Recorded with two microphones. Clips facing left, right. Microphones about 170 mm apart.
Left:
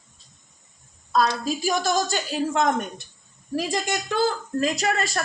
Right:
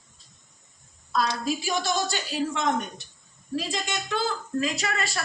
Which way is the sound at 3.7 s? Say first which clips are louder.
Left 4 dB; 50° left (ahead or behind).